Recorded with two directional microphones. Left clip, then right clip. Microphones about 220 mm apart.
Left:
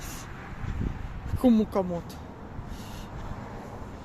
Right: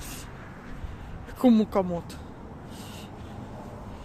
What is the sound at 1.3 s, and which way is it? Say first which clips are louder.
Speech: right 2 dB; 5° right (ahead or behind).